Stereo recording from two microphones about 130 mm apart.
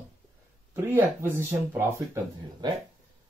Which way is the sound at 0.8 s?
15° right (ahead or behind).